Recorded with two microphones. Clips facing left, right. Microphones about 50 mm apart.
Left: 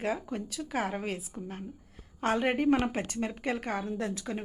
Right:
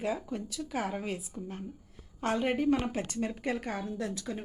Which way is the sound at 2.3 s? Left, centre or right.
Left.